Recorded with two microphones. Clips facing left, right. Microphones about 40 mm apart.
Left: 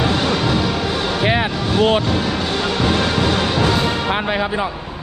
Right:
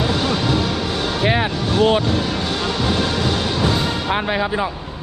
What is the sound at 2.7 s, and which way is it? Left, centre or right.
Music, left.